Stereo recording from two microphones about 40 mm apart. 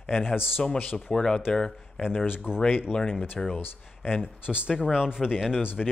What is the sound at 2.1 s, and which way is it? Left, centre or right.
Speech, left.